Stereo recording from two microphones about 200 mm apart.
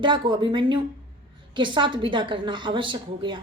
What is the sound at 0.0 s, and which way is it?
A woman's voice, 25° right (ahead or behind).